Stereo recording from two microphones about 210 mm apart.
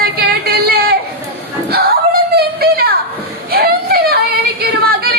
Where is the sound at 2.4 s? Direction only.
45° right (ahead or behind).